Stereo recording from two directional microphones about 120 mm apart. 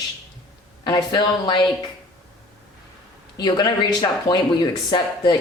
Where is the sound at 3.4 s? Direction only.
35° left (ahead or behind).